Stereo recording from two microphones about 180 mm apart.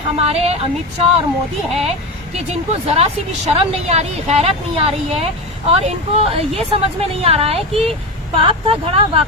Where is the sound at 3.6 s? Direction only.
35° right (ahead or behind).